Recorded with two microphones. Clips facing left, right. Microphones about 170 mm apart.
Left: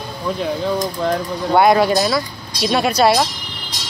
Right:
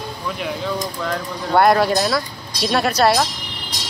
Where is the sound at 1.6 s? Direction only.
Centre (ahead or behind).